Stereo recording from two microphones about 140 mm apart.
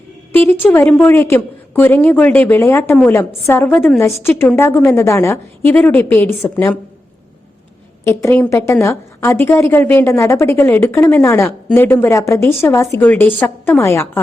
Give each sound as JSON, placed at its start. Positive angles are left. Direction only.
{"t": 0.3, "sound": "a woman's voice", "side_deg": 10}
{"t": 8.0, "sound": "a woman's voice", "side_deg": 15}